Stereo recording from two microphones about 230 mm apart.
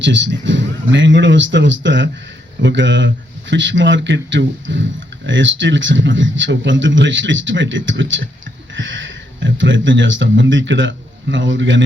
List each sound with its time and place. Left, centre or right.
0.0 s speech: right